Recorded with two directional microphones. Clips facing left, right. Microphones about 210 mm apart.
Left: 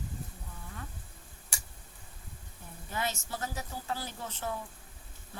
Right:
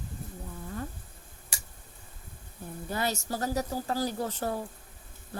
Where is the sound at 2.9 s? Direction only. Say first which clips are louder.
Right 4 dB; 40° right (ahead or behind).